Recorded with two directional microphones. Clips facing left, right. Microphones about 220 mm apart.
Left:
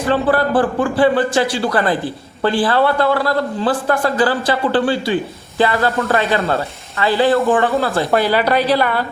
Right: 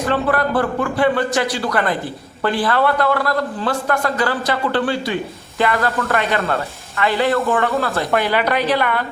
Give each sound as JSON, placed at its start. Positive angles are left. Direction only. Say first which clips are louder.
{"t": 0.1, "sound": "a man's voice", "louder": "left 4 dB", "side_deg": 30}